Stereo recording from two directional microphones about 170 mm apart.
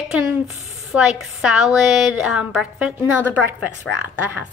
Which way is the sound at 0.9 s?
5° right (ahead or behind).